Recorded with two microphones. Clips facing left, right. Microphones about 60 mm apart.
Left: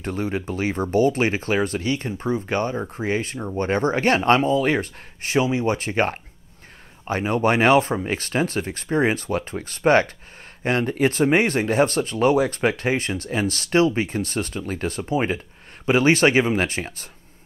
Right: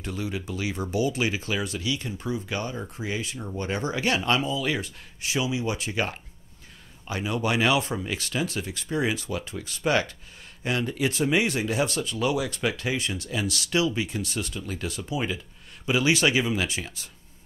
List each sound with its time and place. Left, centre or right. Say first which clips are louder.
0.0 s speech: left 6 dB; left